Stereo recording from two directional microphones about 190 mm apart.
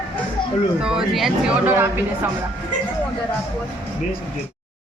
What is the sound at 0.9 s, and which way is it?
Speech, centre (ahead or behind).